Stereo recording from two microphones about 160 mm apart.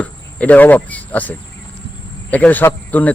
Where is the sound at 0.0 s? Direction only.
10° left (ahead or behind).